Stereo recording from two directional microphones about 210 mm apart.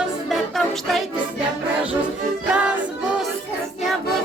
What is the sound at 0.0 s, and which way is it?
Music, centre (ahead or behind).